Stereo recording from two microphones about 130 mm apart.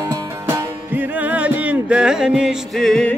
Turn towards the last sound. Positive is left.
turn(degrees=5)  # may be behind; listen again after turning